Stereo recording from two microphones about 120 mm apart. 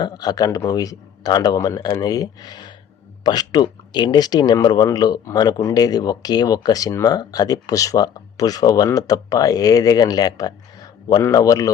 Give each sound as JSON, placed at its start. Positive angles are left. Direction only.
{"t": 0.0, "sound": "a man's voice", "side_deg": 35}